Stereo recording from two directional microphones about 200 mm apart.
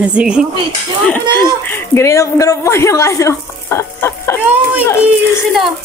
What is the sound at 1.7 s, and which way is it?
A woman's voice, 10° left (ahead or behind).